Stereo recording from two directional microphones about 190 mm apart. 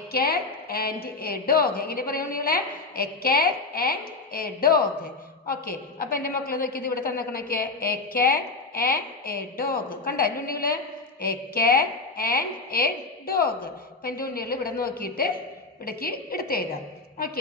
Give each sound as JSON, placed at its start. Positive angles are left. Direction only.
{"t": 0.1, "sound": "a woman's voice", "side_deg": 55}